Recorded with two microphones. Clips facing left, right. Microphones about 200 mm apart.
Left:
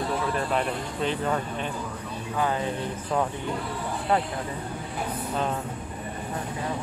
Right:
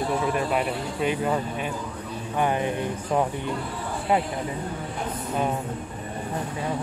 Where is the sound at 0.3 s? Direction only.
10° right (ahead or behind).